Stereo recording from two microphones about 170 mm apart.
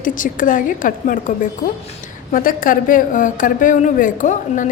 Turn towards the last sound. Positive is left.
turn(degrees=50)  # may be behind; listen again after turning